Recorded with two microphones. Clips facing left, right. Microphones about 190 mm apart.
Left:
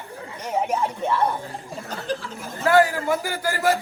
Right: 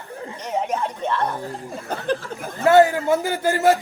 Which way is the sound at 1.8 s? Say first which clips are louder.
Right 5 dB; 55° right (ahead or behind).